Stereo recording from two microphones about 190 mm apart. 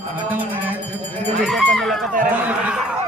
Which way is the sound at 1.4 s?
Centre (ahead or behind).